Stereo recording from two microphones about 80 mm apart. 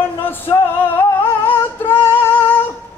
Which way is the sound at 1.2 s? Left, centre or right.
Left.